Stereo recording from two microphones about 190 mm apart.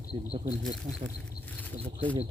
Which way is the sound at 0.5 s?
Centre (ahead or behind).